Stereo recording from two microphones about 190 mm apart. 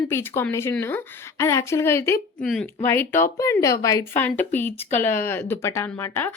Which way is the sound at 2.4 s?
5° left (ahead or behind).